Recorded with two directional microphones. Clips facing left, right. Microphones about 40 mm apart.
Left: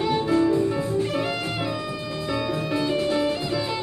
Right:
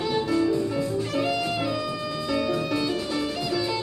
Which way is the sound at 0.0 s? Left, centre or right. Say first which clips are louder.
Left 3 dB; left.